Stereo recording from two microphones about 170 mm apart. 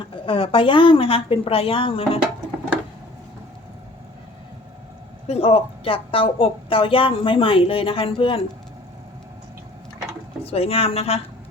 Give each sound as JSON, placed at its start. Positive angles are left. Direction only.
{"t": 0.3, "sound": "speech", "side_deg": 30}
{"t": 5.3, "sound": "speech", "side_deg": 35}
{"t": 10.4, "sound": "speech", "side_deg": 35}